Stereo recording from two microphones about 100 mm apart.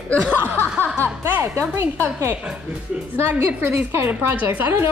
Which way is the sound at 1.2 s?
20° right (ahead or behind).